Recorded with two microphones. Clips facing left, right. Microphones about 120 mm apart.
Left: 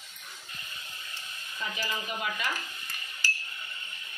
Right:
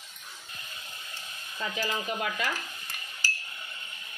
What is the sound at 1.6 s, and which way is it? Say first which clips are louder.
Stir: right 3 dB; 60° right (ahead or behind).